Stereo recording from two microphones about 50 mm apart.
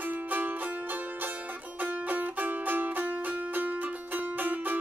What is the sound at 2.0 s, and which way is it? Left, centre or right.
Music, right.